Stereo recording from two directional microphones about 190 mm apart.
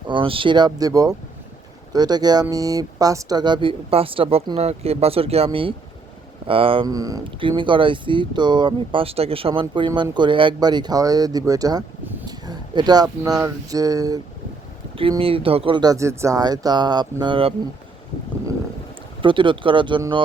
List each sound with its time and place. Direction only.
0.1 s speech: 25° right (ahead or behind)
19.2 s speech: 25° right (ahead or behind)